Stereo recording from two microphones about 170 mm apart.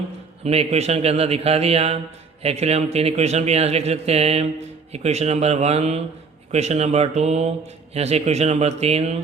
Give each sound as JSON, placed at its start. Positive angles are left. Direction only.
{"t": 0.4, "sound": "a man's voice", "side_deg": -35}